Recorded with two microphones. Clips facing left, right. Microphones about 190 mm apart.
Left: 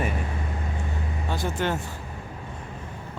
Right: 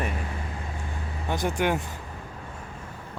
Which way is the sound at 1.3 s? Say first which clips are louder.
Right 2 dB; 15° right (ahead or behind).